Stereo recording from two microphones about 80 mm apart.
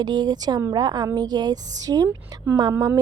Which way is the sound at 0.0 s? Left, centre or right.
Right.